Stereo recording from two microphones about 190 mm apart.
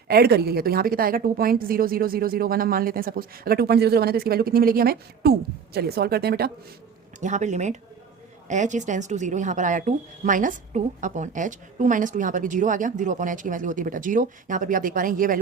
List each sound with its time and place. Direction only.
0.1 s speech: 55° right (ahead or behind)
7.2 s speech: 40° right (ahead or behind)